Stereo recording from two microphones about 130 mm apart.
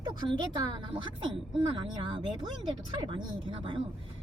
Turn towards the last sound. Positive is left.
turn(degrees=-40)  # may be behind; listen again after turning